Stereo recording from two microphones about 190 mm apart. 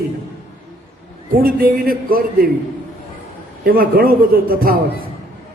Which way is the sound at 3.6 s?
50° right (ahead or behind).